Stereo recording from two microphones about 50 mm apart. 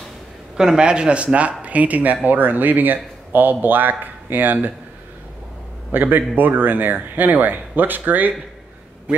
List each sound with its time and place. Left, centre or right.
0.6 s speech: centre; by 4.7 s right
5.9 s speech: right